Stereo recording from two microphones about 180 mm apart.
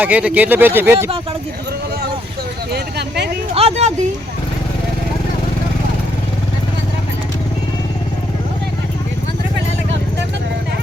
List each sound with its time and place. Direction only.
0.0 s speech: 10° right (ahead or behind)
3.5 s speech: 35° right (ahead or behind)